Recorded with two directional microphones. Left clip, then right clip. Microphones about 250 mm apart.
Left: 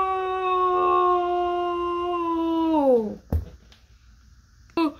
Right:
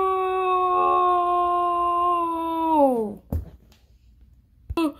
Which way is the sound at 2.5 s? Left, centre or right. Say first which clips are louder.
Right 3 dB; right.